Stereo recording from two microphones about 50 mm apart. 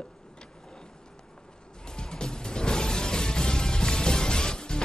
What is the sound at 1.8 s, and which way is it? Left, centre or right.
Music, centre.